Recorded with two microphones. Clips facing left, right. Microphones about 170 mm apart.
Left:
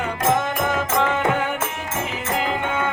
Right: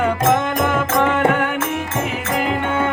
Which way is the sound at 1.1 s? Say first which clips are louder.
Right 4 dB; 60° right (ahead or behind).